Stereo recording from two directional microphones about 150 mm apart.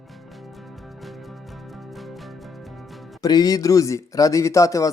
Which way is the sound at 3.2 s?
25° left (ahead or behind).